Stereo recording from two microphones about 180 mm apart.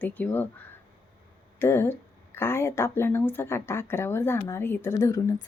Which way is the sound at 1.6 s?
15° left (ahead or behind).